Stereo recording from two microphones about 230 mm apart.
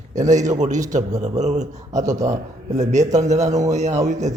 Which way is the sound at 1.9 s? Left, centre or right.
Centre.